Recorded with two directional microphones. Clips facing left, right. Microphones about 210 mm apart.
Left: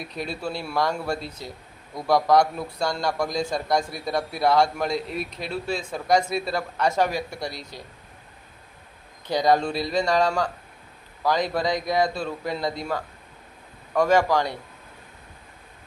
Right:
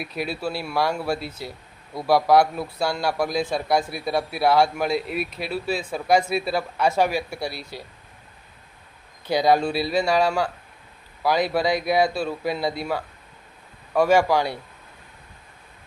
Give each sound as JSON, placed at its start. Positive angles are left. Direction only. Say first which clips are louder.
{"t": 0.0, "sound": "speech", "louder": "right 3 dB", "side_deg": -5}
{"t": 9.2, "sound": "speech", "louder": "right 2 dB", "side_deg": -10}